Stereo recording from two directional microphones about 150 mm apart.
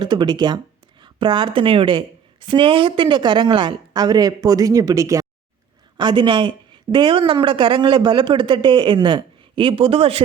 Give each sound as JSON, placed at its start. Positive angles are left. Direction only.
{"t": 0.0, "sound": "a woman's voice", "side_deg": -30}